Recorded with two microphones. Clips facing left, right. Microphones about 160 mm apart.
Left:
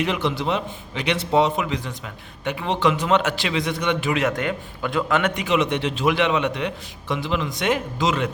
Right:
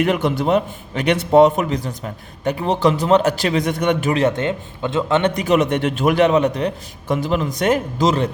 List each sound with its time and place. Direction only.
0.0 s a man's voice: 50° right (ahead or behind)
4.2 s speech: 25° right (ahead or behind)
5.3 s a man's voice: 40° right (ahead or behind)